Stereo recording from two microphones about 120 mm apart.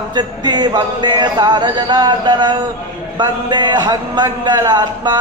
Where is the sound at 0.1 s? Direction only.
35° right (ahead or behind).